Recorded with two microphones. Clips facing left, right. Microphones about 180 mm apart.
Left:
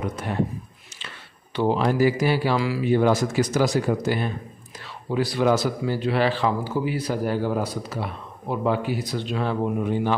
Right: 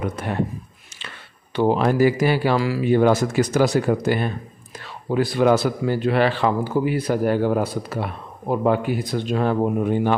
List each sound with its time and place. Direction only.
1.5 s speech: 50° right (ahead or behind)